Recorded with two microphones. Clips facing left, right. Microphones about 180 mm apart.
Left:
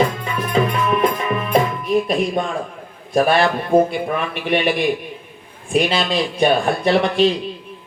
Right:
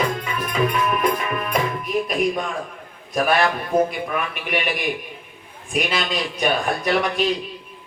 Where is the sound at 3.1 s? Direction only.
30° left (ahead or behind).